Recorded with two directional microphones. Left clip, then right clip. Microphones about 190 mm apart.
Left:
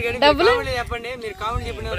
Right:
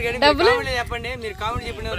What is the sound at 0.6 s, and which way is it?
Speech, 10° right (ahead or behind).